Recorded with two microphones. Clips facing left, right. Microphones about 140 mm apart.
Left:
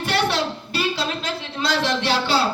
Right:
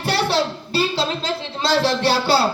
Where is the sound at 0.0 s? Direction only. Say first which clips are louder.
Right 2 dB; 30° right (ahead or behind).